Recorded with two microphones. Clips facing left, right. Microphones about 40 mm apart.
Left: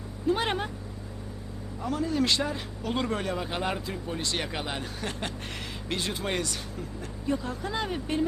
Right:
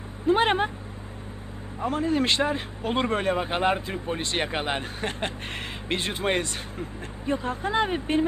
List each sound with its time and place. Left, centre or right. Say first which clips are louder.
0.3 s speech: right 6 dB; right
1.8 s speech: right 3 dB; right